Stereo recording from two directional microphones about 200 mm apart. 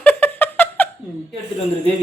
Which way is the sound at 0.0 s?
10° left (ahead or behind).